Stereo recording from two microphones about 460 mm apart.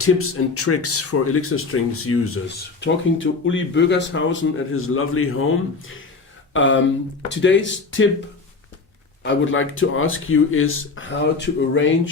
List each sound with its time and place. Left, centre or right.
0.0 s speech: left
6.5 s speech: left
9.2 s speech: left